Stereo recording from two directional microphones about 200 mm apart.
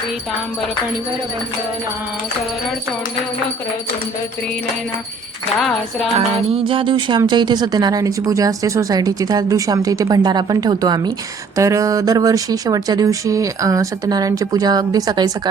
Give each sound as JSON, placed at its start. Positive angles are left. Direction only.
{"t": 6.1, "sound": "speech", "side_deg": -25}